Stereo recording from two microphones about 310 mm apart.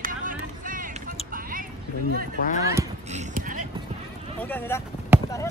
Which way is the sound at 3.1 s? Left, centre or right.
Right.